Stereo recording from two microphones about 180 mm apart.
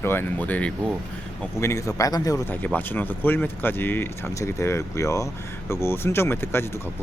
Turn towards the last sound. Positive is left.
turn(degrees=15)  # may be behind; listen again after turning